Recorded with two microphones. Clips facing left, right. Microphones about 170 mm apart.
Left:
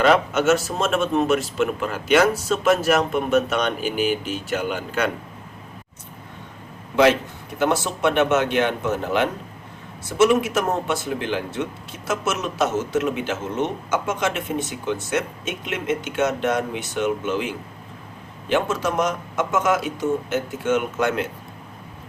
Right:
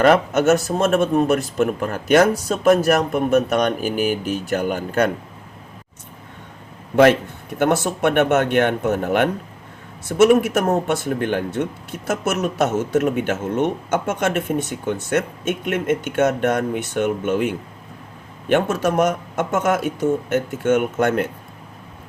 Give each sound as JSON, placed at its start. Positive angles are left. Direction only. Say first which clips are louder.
{"t": 0.0, "sound": "speech", "louder": "right 3 dB", "side_deg": -45}
{"t": 7.6, "sound": "speech", "louder": "right 3 dB", "side_deg": -55}